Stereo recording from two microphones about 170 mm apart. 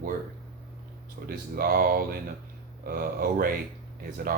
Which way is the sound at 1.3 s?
60° right (ahead or behind).